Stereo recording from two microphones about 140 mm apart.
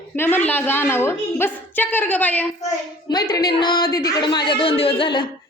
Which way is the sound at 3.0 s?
30° left (ahead or behind).